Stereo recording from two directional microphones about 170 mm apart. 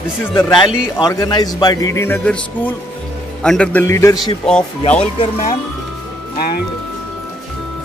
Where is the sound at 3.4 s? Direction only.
5° left (ahead or behind).